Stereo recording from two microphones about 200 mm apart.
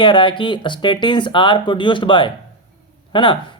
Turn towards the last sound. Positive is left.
turn(degrees=25)  # may be behind; listen again after turning